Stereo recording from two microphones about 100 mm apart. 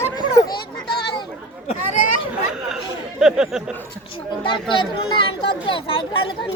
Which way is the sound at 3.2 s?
5° right (ahead or behind).